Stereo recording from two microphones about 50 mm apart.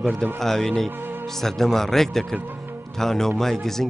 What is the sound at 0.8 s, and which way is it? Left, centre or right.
Speech, right.